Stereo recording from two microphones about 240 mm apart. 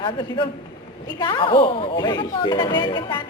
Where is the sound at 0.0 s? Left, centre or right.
Centre.